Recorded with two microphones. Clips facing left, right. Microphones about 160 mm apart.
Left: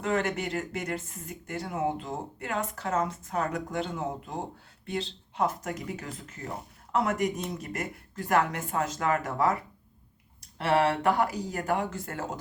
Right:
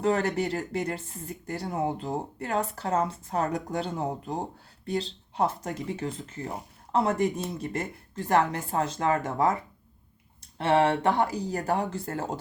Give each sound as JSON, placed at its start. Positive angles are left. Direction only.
{"t": 0.0, "sound": "speech", "side_deg": -35}
{"t": 10.6, "sound": "speech", "side_deg": -25}